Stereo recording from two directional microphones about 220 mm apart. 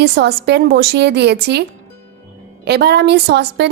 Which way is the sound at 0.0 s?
50° right (ahead or behind).